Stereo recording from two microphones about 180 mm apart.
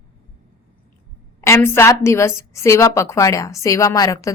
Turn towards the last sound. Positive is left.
turn(degrees=20)  # may be behind; listen again after turning